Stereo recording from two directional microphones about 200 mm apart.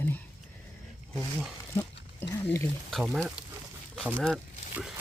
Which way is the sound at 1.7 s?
10° left (ahead or behind).